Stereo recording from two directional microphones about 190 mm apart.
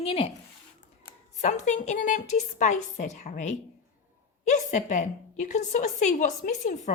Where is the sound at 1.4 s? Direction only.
40° left (ahead or behind).